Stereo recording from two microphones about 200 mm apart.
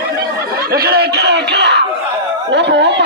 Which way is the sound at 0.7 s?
50° right (ahead or behind).